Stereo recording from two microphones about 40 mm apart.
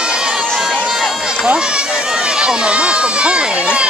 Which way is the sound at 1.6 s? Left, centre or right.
Right.